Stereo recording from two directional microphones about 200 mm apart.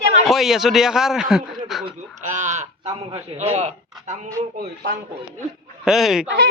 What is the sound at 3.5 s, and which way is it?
Speech, 35° right (ahead or behind).